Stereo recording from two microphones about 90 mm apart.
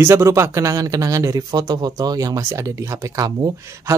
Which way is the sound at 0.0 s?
35° right (ahead or behind).